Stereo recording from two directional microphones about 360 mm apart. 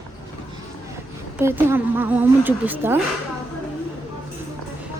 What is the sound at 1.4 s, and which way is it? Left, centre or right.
Speech, centre.